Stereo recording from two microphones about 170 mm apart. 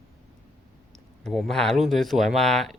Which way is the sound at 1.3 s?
Centre (ahead or behind).